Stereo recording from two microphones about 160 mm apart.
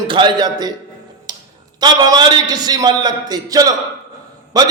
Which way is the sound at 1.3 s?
25° right (ahead or behind).